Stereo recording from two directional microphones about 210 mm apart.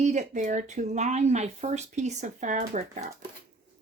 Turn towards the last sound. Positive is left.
turn(degrees=-35)  # may be behind; listen again after turning